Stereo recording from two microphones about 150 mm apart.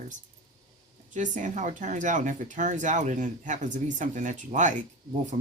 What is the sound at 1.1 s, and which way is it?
Speech, 55° right (ahead or behind).